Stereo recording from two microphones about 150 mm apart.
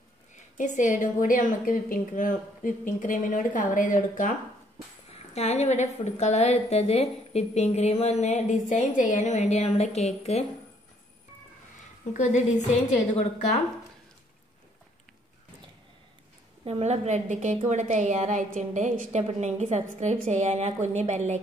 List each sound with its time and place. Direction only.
0.6 s a woman's voice: 55° left (ahead or behind)
5.1 s a woman's voice: 45° left (ahead or behind)
12.1 s a woman's voice: 55° left (ahead or behind)
16.6 s a woman's voice: 45° right (ahead or behind)